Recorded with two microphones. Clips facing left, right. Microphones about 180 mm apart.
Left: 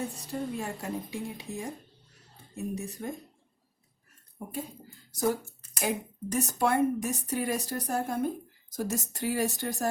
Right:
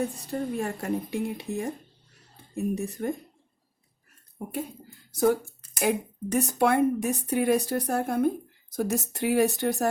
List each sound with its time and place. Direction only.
0.3 s a woman's voice: 55° right (ahead or behind)
5.1 s a woman's voice: 60° right (ahead or behind)